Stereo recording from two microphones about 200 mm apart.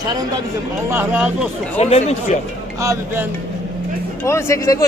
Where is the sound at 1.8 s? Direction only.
30° left (ahead or behind).